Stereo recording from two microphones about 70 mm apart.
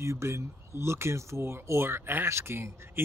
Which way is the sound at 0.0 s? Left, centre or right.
Right.